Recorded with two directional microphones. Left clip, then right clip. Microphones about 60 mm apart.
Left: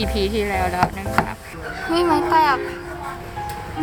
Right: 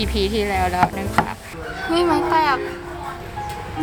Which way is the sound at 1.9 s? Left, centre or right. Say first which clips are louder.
Left 1 dB; centre.